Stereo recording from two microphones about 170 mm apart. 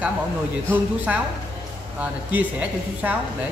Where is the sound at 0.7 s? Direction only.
10° right (ahead or behind).